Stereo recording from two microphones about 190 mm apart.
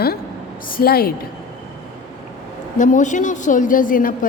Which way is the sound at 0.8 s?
55° left (ahead or behind).